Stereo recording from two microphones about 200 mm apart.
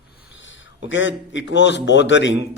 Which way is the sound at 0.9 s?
70° left (ahead or behind).